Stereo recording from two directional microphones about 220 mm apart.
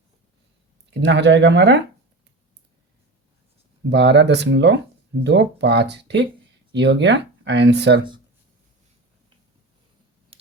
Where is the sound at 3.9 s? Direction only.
50° right (ahead or behind).